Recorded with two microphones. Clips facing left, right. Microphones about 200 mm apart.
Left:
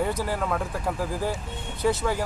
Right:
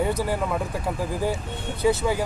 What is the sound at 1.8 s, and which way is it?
Speech, 10° right (ahead or behind).